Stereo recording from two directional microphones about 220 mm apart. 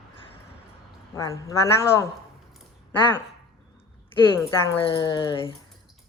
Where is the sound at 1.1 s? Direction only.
15° left (ahead or behind).